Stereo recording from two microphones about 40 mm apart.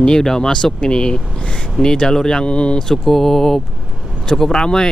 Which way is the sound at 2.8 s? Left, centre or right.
Centre.